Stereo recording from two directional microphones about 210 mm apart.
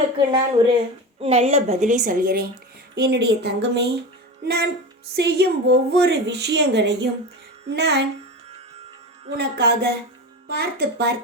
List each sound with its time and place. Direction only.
0.3 s a woman's voice: 20° right (ahead or behind); by 8.0 s 55° right (ahead or behind)
9.4 s a woman's voice: 50° right (ahead or behind)